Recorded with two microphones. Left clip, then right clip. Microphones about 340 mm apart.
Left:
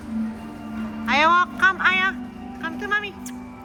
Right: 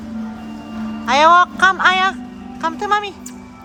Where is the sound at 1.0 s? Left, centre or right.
Centre.